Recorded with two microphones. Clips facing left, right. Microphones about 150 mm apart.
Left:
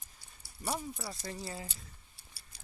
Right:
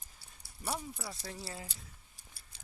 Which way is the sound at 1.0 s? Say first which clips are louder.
Left 2 dB; centre (ahead or behind).